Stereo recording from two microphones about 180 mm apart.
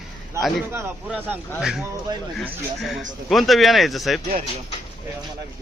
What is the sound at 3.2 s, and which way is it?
Speech, centre (ahead or behind).